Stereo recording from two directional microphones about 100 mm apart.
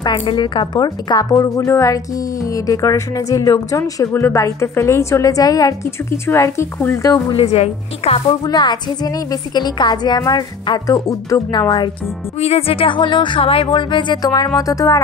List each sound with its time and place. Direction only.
0.0 s a woman's voice: 55° left (ahead or behind); by 7.0 s 25° left (ahead or behind)
7.0 s speech: 40° left (ahead or behind)
7.3 s speech: 85° left
8.5 s a woman's voice: 45° left (ahead or behind)
12.4 s a woman's voice: 85° left; by 15.0 s 35° left (ahead or behind)